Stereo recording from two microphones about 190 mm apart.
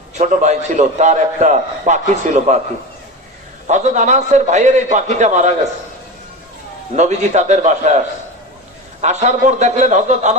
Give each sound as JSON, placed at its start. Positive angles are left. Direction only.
{"t": 0.2, "sound": "a man's voice", "side_deg": -40}
{"t": 3.7, "sound": "a man's voice", "side_deg": -40}
{"t": 6.9, "sound": "a man's voice", "side_deg": -35}
{"t": 9.0, "sound": "a man's voice", "side_deg": -35}